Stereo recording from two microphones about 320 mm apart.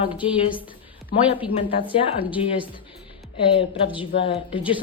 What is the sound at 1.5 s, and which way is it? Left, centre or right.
Speech, centre.